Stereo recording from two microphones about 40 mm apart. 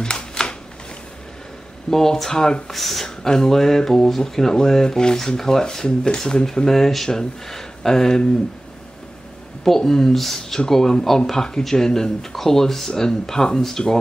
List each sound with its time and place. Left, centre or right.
0.0 s a sound: centre
1.9 s speech: centre
9.7 s speech: centre